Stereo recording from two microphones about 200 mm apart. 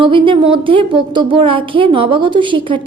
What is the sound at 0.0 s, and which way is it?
A woman's voice, 25° right (ahead or behind).